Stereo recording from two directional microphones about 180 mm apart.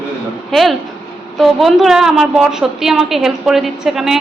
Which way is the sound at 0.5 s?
Centre (ahead or behind).